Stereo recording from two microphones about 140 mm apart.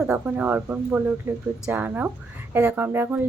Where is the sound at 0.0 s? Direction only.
5° right (ahead or behind).